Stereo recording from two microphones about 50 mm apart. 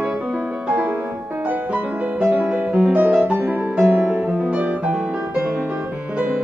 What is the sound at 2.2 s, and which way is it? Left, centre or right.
Music, right.